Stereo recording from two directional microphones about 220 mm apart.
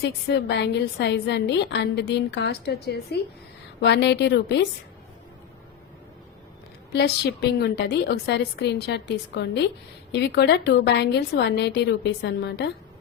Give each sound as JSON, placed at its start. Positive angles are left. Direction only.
{"t": 0.0, "sound": "a woman's voice", "side_deg": 50}
{"t": 6.9, "sound": "a woman's voice", "side_deg": 50}